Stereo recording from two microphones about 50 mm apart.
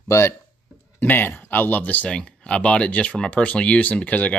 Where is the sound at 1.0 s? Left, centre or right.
Left.